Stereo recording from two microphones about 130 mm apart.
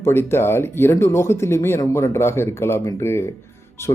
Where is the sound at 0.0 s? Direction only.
20° left (ahead or behind).